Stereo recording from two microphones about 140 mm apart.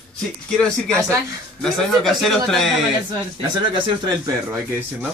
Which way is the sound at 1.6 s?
Centre (ahead or behind).